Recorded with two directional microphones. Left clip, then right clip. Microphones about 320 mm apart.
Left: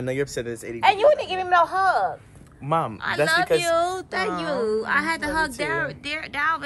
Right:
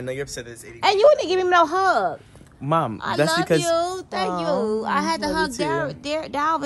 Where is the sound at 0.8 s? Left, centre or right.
Right.